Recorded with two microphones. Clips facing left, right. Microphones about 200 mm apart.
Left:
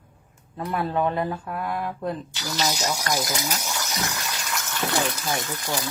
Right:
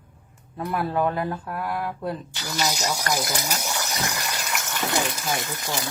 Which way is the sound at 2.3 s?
10° right (ahead or behind).